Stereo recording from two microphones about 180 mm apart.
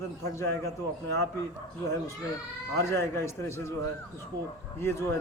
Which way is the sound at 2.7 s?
15° left (ahead or behind).